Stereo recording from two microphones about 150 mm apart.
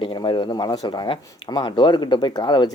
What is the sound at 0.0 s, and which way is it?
Speech, 35° left (ahead or behind).